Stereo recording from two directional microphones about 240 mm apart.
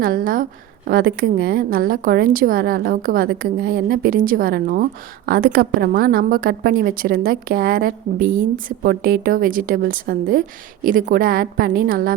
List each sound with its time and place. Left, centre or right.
0.0 s a woman's voice: right